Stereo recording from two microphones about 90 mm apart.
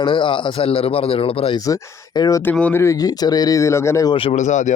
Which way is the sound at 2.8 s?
40° left (ahead or behind).